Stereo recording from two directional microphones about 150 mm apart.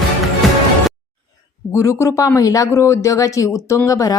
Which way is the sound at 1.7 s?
20° left (ahead or behind).